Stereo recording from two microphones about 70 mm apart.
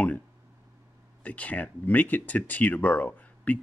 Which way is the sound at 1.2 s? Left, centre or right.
Left.